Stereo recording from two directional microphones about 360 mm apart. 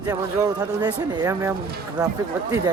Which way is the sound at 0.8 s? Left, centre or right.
Centre.